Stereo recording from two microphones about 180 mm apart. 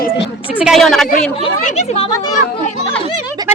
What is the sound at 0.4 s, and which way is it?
Speech, 5° right (ahead or behind).